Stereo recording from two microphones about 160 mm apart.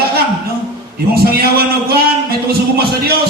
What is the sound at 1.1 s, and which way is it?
A man's voice, 75° right (ahead or behind).